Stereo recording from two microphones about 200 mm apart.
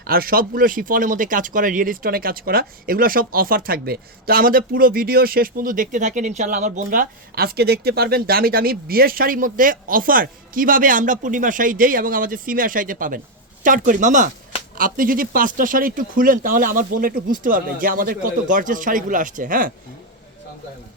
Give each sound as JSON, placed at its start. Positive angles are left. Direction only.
{"t": 0.0, "sound": "speech", "side_deg": -50}